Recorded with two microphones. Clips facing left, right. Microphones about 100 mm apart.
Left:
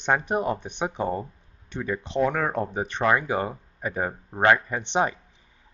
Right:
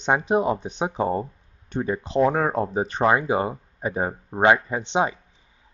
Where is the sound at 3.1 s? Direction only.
20° right (ahead or behind).